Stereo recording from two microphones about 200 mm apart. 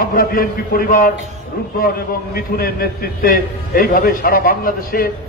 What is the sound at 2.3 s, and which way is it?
A man's voice, 50° left (ahead or behind).